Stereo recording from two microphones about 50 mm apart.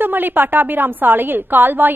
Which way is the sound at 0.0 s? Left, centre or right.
Right.